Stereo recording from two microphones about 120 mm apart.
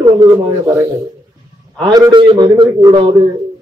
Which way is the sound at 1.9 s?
35° right (ahead or behind).